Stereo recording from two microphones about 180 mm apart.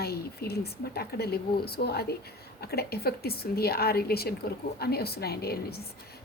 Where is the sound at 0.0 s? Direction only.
60° left (ahead or behind).